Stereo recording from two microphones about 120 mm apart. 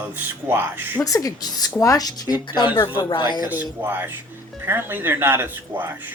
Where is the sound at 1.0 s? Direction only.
30° left (ahead or behind).